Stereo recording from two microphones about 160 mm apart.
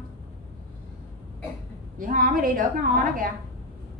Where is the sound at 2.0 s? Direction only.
60° right (ahead or behind).